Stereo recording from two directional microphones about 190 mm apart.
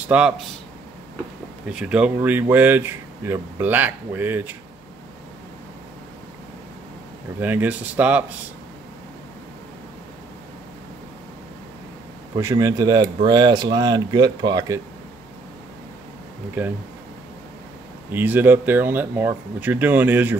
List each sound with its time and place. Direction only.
0.0 s speech: 5° right (ahead or behind)
1.7 s speech: 5° right (ahead or behind)
7.3 s speech: 10° right (ahead or behind)
12.4 s speech: 15° right (ahead or behind)
16.6 s speech: 10° right (ahead or behind)
18.1 s speech: 10° right (ahead or behind)